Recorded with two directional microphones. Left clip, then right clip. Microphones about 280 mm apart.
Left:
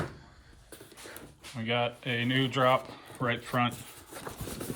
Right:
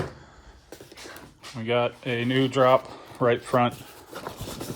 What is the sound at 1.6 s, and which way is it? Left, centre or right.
Speech, centre.